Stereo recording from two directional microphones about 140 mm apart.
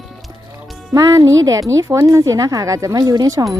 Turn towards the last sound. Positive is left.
turn(degrees=-25)  # may be behind; listen again after turning